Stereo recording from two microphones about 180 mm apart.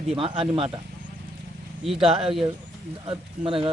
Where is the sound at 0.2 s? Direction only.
30° right (ahead or behind).